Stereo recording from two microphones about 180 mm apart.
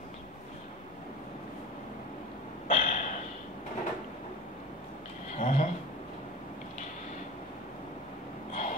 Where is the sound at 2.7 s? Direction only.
45° left (ahead or behind).